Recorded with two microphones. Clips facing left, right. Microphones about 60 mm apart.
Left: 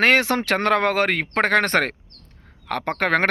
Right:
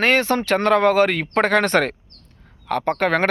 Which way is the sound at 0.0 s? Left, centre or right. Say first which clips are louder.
Even; left.